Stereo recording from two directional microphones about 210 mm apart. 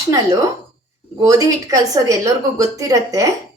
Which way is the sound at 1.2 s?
15° right (ahead or behind).